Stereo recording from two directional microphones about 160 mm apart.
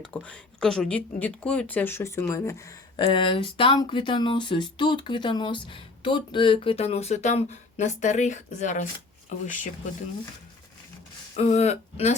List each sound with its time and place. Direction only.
0.0 s speech: 10° left (ahead or behind)
2.9 s speech: 30° left (ahead or behind); by 9.5 s 50° left (ahead or behind)
11.3 s speech: 45° left (ahead or behind)